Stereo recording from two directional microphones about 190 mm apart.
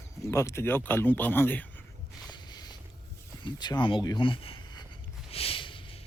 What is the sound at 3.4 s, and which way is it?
Speech, 20° left (ahead or behind).